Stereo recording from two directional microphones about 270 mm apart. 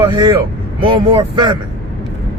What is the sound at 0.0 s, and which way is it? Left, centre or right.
A man's voice, centre.